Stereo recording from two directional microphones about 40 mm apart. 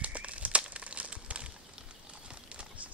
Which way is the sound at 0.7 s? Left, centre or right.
Right.